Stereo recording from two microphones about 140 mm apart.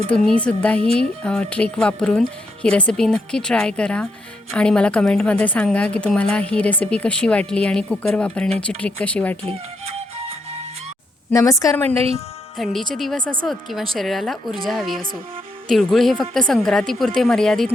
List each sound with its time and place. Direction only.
0.1 s a woman's voice: 10° left (ahead or behind)
11.3 s speech: 20° left (ahead or behind)
12.5 s a woman's voice: centre (ahead or behind)